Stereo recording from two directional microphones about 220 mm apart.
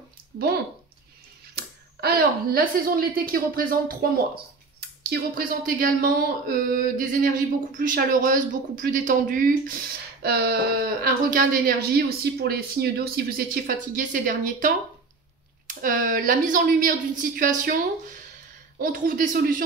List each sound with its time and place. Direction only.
1.5 s speech: 45° right (ahead or behind)